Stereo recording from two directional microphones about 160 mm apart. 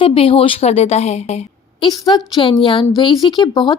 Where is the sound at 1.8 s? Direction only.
25° left (ahead or behind).